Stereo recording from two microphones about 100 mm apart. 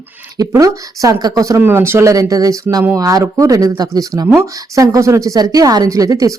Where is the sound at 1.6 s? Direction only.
25° right (ahead or behind).